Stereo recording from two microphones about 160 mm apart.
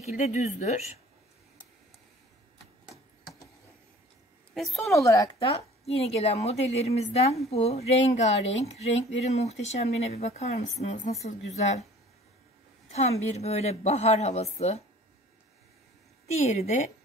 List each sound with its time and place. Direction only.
0.0 s speech: 45° left (ahead or behind)
4.6 s a woman's voice: centre (ahead or behind)
4.9 s speech: 20° left (ahead or behind)
5.4 s a woman's voice: 40° left (ahead or behind)
12.9 s a woman's voice: 40° left (ahead or behind)
16.3 s speech: 45° left (ahead or behind)